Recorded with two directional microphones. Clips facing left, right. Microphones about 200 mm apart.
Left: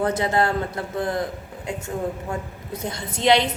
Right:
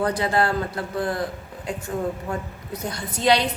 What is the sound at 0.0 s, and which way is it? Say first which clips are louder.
A woman's voice: left 1 dB; 20° left (ahead or behind).